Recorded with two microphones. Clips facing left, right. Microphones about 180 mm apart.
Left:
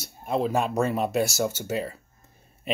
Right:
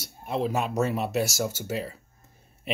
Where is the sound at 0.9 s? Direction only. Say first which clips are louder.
Left 2 dB; 45° left (ahead or behind).